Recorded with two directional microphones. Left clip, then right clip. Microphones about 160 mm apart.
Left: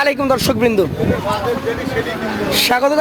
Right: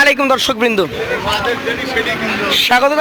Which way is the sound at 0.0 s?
Centre (ahead or behind).